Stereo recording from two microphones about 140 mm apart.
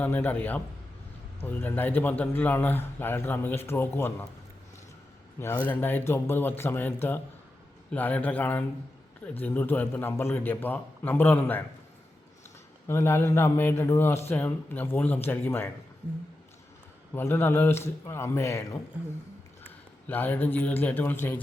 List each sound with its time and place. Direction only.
0.0 s a man's voice: 15° left (ahead or behind)
5.4 s a man's voice: 15° left (ahead or behind)
12.9 s a man's voice: 20° left (ahead or behind)
17.2 s a man's voice: 15° left (ahead or behind)
20.1 s a man's voice: 15° left (ahead or behind)